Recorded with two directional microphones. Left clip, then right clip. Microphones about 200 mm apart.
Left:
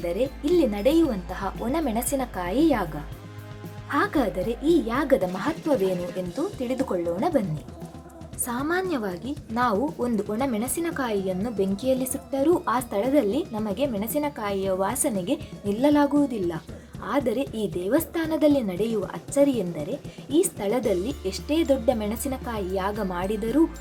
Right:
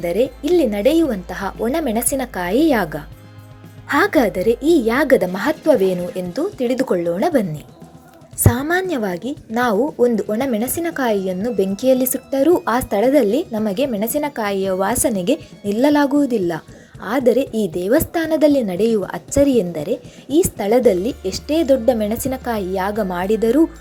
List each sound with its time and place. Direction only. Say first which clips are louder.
0.0 s speech: right 7 dB; 20° right (ahead or behind)
8.7 s speech: right 7 dB; 20° right (ahead or behind)